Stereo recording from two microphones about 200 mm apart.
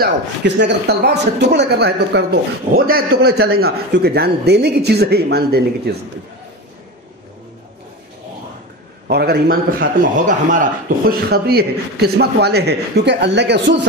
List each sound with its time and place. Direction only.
0.6 s a man's voice: 60° right (ahead or behind)
9.0 s a man's voice: 50° right (ahead or behind)